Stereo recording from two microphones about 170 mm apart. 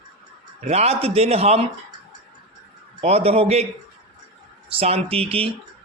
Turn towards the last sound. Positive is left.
turn(degrees=-35)  # may be behind; listen again after turning